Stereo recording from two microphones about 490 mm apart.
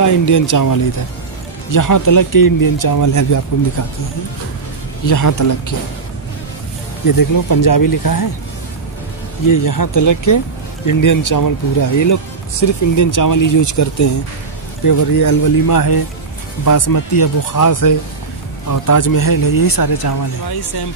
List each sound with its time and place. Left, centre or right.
0.0 s speech: left
5.0 s speech: left
7.2 s speech: left
9.5 s speech: left